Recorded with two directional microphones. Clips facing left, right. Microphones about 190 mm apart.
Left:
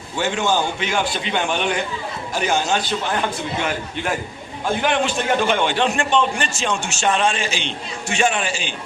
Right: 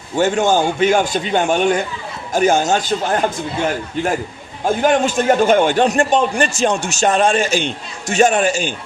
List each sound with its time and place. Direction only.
0.2 s a man's voice: 45° right (ahead or behind)
4.6 s a man's voice: 45° right (ahead or behind)